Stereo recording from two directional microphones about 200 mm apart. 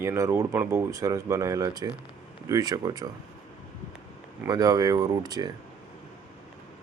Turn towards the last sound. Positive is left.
turn(degrees=-20)  # may be behind; listen again after turning